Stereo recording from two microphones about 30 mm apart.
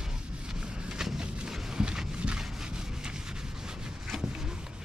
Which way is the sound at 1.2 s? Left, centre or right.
Right.